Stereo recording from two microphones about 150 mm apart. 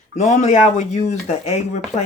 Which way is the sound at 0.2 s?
50° left (ahead or behind).